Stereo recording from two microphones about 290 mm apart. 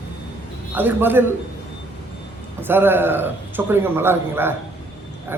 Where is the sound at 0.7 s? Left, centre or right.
Centre.